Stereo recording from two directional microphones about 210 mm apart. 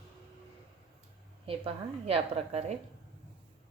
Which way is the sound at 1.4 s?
25° right (ahead or behind).